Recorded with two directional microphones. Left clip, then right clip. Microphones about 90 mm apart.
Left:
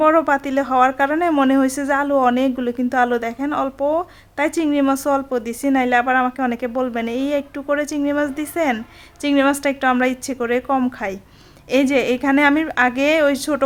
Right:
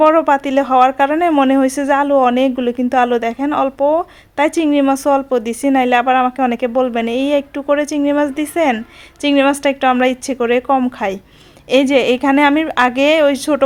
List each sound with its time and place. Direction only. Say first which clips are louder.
0.0 s speech: right 4 dB; 20° right (ahead or behind)
11.7 s speech: right 5 dB; 25° right (ahead or behind)